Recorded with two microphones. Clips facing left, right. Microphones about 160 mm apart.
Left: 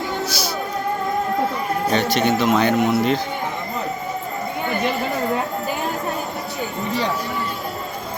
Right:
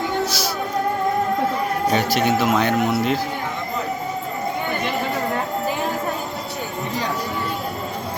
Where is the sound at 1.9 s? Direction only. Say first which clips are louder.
Left 1 dB; 5° right (ahead or behind).